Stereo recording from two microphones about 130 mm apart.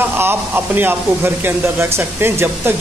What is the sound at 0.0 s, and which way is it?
Speech, 15° right (ahead or behind).